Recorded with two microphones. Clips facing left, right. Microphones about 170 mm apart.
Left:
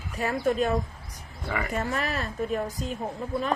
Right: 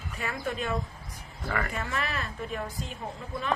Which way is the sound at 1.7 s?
40° left (ahead or behind).